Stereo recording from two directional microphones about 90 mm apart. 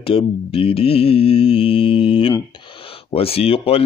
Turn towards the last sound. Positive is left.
turn(degrees=90)